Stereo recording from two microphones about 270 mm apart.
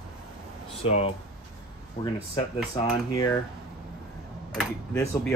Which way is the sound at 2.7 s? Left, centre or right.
Centre.